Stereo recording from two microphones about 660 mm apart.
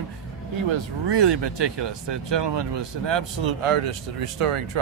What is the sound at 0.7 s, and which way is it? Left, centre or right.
Speech, right.